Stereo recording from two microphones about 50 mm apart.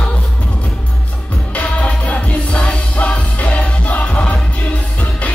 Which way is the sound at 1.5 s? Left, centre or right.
Left.